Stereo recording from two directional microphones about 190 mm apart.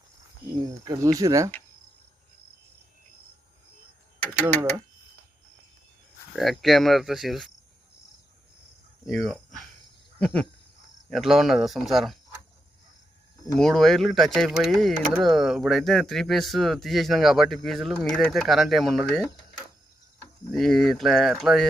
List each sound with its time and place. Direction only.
0.6 s speech: 20° right (ahead or behind)
6.3 s speech: centre (ahead or behind)
9.0 s speech: centre (ahead or behind)
10.2 s a sound: 5° left (ahead or behind)
11.1 s speech: centre (ahead or behind)
13.6 s speech: centre (ahead or behind)
20.5 s speech: centre (ahead or behind)